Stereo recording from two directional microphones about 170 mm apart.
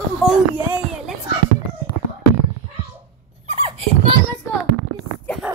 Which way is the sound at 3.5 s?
35° right (ahead or behind).